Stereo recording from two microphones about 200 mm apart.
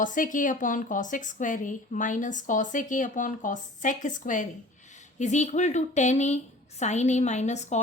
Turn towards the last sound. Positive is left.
turn(degrees=35)  # may be behind; listen again after turning